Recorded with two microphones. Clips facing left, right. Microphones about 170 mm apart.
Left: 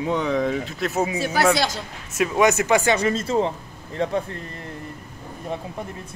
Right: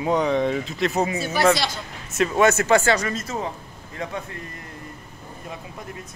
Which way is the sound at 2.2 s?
10° left (ahead or behind).